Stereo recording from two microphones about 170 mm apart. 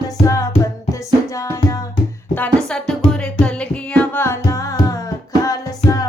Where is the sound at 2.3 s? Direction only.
5° left (ahead or behind).